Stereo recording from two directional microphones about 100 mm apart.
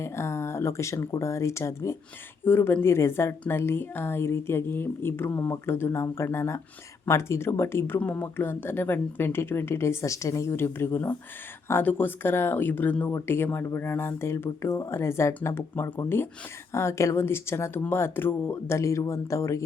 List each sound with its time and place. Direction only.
0.0 s speech: 25° left (ahead or behind)